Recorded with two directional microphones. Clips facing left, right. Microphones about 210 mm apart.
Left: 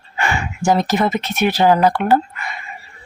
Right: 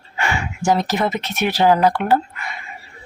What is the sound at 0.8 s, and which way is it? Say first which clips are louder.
Speech: left 3 dB; 50° left (ahead or behind).